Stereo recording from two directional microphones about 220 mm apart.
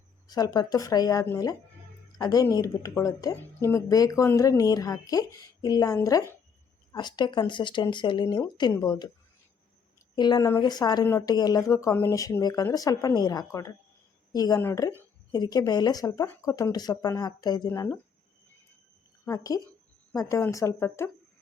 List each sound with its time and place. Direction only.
0.3 s a woman's voice: 15° left (ahead or behind)
10.2 s a woman's voice: 20° left (ahead or behind)
19.2 s a woman's voice: 15° left (ahead or behind)